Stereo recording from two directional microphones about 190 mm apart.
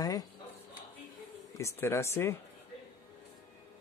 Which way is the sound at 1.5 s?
15° left (ahead or behind).